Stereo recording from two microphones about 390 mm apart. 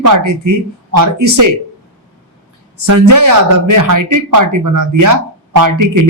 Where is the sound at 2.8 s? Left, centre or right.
Right.